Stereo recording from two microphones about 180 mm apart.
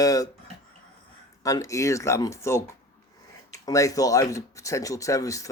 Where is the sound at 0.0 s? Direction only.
20° left (ahead or behind).